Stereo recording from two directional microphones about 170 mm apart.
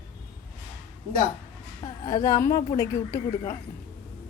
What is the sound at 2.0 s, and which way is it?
Speech, 20° left (ahead or behind).